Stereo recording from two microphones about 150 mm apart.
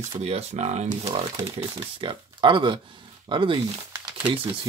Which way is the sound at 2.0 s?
35° right (ahead or behind).